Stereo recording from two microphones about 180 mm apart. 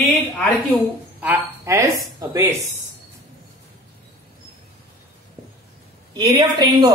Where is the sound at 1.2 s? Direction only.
10° right (ahead or behind).